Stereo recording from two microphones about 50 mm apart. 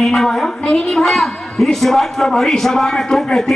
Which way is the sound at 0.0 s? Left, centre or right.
Centre.